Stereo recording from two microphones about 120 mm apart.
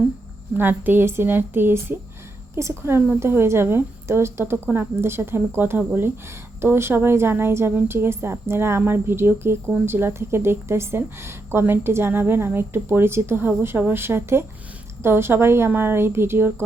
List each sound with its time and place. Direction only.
0.5 s a woman's voice: 15° right (ahead or behind)